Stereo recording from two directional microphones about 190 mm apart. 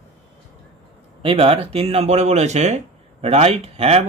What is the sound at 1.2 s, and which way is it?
Speech, 30° right (ahead or behind).